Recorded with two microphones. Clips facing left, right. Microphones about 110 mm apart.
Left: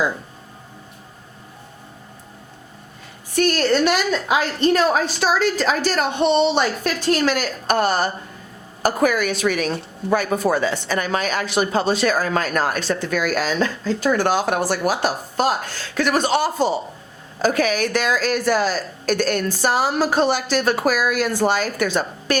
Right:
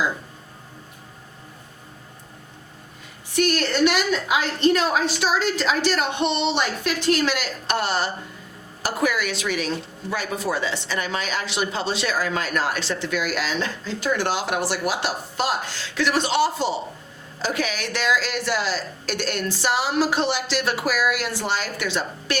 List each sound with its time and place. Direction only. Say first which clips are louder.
3.3 s a woman's voice: left 4 dB; 40° left (ahead or behind)